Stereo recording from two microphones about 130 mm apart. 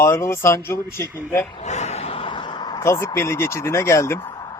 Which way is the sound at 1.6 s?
60° left (ahead or behind).